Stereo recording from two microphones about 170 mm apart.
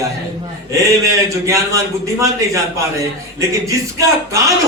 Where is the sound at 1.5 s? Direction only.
20° right (ahead or behind).